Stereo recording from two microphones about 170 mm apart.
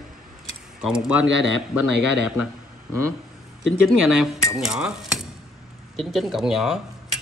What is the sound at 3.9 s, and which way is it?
Speech, centre (ahead or behind).